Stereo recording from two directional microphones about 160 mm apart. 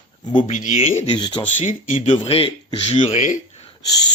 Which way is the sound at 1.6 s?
45° left (ahead or behind).